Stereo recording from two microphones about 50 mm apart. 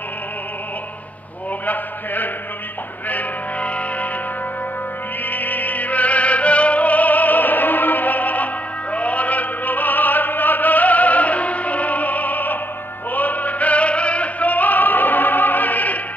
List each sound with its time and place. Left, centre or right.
1.7 s a sound: left
3.1 s music: left
5.3 s music: left
8.9 s opera: left
13.1 s music: left